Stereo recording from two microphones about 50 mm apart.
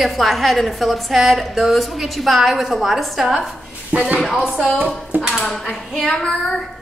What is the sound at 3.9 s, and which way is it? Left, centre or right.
Speech, right.